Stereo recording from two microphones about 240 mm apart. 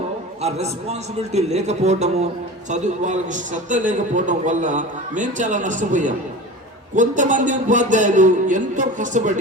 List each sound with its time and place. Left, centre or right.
0.4 s a man's voice: right